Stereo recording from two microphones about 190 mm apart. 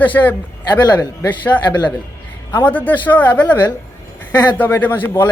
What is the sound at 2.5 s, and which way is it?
Speech, 10° left (ahead or behind).